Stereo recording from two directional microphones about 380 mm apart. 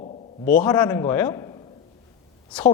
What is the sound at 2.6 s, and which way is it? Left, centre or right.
Speech, centre.